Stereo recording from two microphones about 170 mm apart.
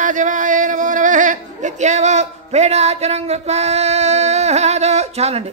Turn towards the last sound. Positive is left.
turn(degrees=-40)  # may be behind; listen again after turning